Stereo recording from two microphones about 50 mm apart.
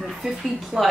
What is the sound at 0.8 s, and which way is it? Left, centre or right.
Speech, centre.